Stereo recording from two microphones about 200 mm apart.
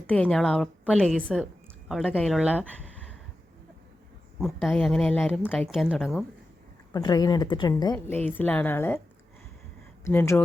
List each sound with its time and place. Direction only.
0.1 s a woman's voice: 5° left (ahead or behind)
4.4 s a woman's voice: centre (ahead or behind)
6.9 s a woman's voice: 20° left (ahead or behind)
7.9 s a woman's voice: 10° left (ahead or behind)
10.0 s a woman's voice: 10° left (ahead or behind)